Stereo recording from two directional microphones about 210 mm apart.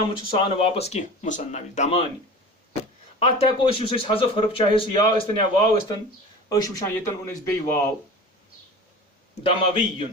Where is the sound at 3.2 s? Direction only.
25° left (ahead or behind).